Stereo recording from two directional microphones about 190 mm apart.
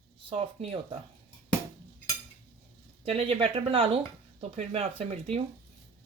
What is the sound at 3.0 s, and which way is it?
Speech, 30° right (ahead or behind).